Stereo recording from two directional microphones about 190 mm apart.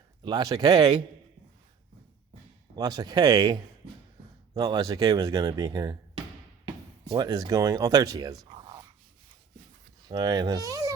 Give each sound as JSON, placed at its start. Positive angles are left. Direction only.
{"t": 0.2, "sound": "speech", "side_deg": -25}
{"t": 2.7, "sound": "speech", "side_deg": -20}
{"t": 7.1, "sound": "speech", "side_deg": -20}
{"t": 10.1, "sound": "speech", "side_deg": -20}